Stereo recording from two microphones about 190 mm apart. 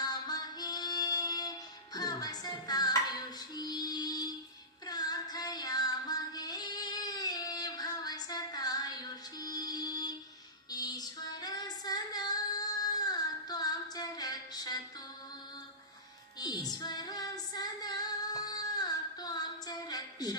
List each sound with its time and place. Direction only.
0.0 s female singing: 20° left (ahead or behind)
3.5 s music: 20° left (ahead or behind)
4.9 s female singing: 20° left (ahead or behind)
16.4 s female singing: 20° left (ahead or behind)